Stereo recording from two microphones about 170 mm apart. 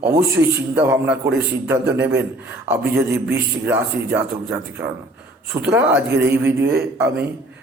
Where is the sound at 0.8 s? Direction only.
10° right (ahead or behind).